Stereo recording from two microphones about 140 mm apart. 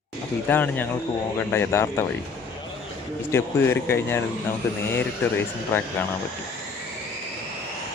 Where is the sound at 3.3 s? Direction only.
15° left (ahead or behind).